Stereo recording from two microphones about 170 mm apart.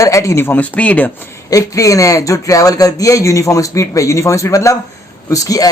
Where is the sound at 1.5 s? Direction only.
20° left (ahead or behind).